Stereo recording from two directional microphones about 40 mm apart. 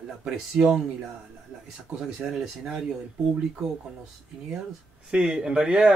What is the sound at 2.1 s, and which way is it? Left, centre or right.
Speech, centre.